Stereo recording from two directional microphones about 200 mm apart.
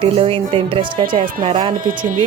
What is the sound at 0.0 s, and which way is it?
Speech, 25° right (ahead or behind).